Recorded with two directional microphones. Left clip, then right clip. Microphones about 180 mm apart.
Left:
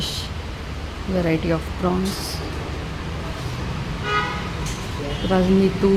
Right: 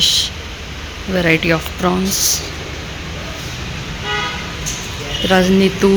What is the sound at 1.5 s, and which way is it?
Speech, 15° right (ahead or behind).